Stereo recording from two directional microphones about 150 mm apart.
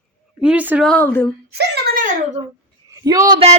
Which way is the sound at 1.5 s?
90° right.